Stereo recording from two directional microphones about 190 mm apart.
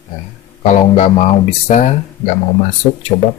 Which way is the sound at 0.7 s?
35° left (ahead or behind).